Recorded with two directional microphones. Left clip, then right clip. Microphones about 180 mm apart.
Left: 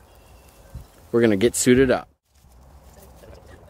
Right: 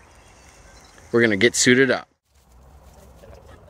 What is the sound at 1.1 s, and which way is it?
Speech, 10° left (ahead or behind).